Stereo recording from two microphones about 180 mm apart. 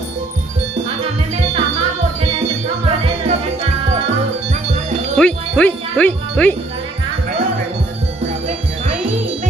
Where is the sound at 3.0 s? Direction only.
35° right (ahead or behind).